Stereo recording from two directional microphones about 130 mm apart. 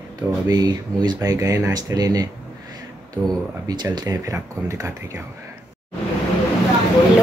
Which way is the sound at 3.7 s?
30° right (ahead or behind).